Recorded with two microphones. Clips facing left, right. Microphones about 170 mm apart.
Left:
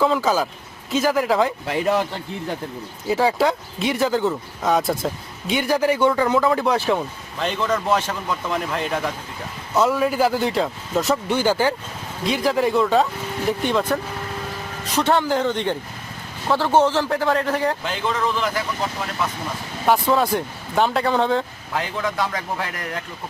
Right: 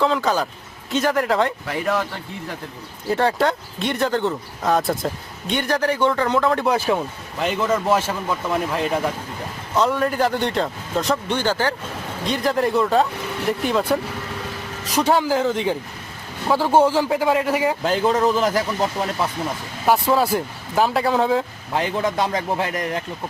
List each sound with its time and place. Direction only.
0.0 s speech: 5° left (ahead or behind)
1.6 s speech: 25° left (ahead or behind)
3.1 s speech: centre (ahead or behind)
12.2 s speech: centre (ahead or behind)
14.9 s speech: 10° right (ahead or behind)
17.8 s a man's voice: 40° right (ahead or behind)
19.8 s speech: 5° right (ahead or behind)
21.7 s a man's voice: 25° right (ahead or behind)